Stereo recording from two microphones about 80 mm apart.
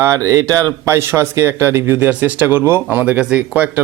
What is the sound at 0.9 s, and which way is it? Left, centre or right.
Speech, right.